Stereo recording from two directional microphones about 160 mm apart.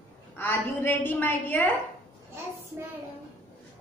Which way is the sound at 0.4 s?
15° left (ahead or behind).